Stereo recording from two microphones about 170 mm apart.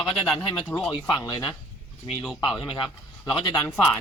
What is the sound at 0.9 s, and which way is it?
Speech, 25° left (ahead or behind).